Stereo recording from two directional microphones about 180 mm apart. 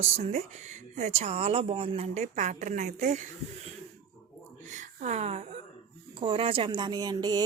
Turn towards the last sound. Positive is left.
turn(degrees=-25)  # may be behind; listen again after turning